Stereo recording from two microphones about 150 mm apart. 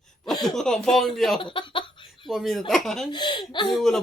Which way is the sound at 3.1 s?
30° left (ahead or behind).